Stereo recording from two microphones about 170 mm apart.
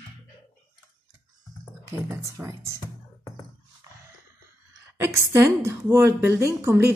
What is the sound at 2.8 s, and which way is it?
Music, 20° left (ahead or behind).